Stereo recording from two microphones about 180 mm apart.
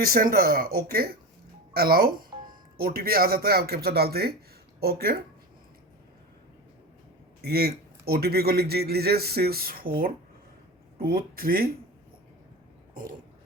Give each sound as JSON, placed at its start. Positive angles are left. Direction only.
{"t": 0.0, "sound": "a man's voice", "side_deg": -55}
{"t": 7.4, "sound": "a man's voice", "side_deg": -60}